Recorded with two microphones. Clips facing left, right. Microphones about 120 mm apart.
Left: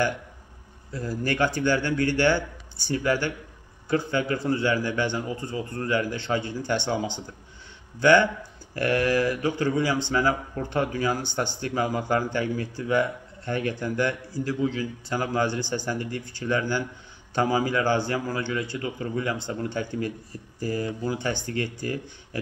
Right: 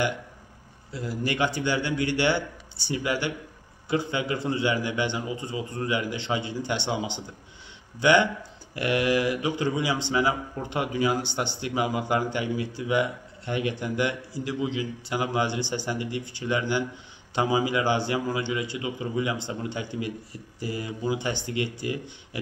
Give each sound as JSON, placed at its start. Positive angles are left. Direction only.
{"t": 1.0, "sound": "speech", "side_deg": -15}